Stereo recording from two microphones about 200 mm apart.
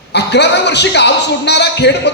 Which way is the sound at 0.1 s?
60° left (ahead or behind).